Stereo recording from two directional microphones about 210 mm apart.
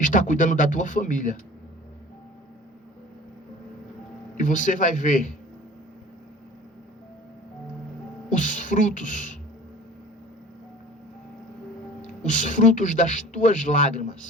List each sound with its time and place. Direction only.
0.0 s speech: 40° left (ahead or behind)
4.4 s speech: 40° left (ahead or behind)
8.3 s speech: 35° left (ahead or behind)
12.2 s speech: 35° left (ahead or behind)